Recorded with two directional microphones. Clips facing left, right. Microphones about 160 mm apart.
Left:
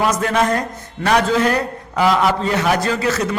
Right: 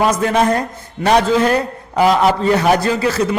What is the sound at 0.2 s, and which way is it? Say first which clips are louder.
A man's voice: right 3 dB; 30° right (ahead or behind).